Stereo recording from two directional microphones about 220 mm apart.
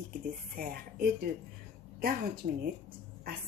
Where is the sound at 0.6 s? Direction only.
40° right (ahead or behind).